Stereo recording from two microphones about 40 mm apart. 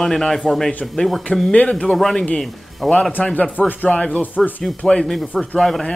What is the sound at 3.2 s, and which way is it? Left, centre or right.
Speech, left.